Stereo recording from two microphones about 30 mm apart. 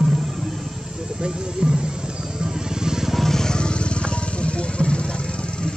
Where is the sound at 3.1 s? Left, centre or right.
Centre.